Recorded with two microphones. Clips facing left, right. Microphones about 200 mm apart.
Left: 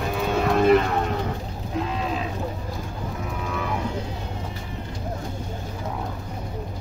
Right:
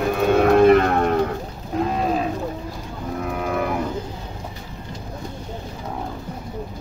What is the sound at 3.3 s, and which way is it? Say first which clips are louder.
Cattle: right 7 dB; 55° right (ahead or behind).